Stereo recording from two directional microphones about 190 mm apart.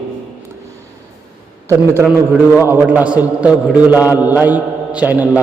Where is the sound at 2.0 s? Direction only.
10° right (ahead or behind).